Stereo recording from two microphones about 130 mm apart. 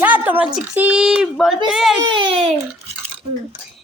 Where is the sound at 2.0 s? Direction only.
40° right (ahead or behind).